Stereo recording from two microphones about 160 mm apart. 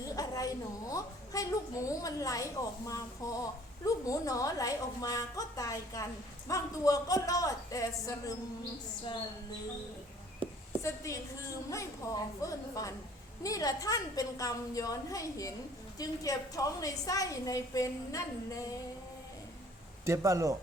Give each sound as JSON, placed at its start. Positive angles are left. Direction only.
{"t": 0.0, "sound": "a woman's voice", "side_deg": 20}
{"t": 10.4, "sound": "a sound", "side_deg": -30}
{"t": 10.8, "sound": "a woman's voice", "side_deg": 20}
{"t": 20.1, "sound": "speech", "side_deg": -20}